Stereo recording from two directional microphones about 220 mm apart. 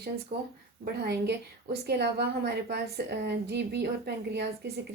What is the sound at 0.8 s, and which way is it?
Speech, 45° right (ahead or behind).